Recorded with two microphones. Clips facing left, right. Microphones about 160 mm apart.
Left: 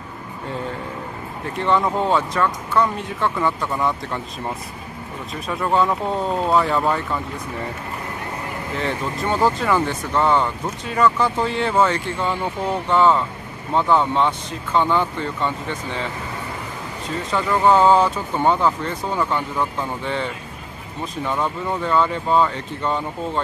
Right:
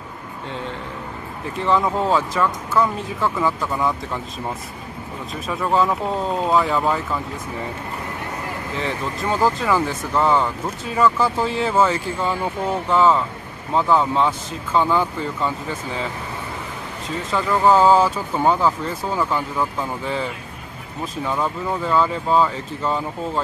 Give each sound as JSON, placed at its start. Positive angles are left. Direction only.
{"t": 1.6, "sound": "speech", "side_deg": 0}
{"t": 5.3, "sound": "speech", "side_deg": 0}
{"t": 8.7, "sound": "speech", "side_deg": 0}
{"t": 17.3, "sound": "speech", "side_deg": 0}